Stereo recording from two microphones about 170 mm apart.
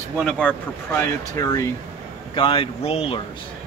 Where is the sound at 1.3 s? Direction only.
20° left (ahead or behind).